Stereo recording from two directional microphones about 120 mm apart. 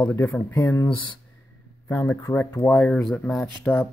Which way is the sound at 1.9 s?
25° left (ahead or behind).